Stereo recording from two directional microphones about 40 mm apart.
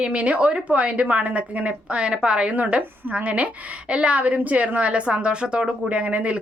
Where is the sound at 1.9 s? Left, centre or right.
Right.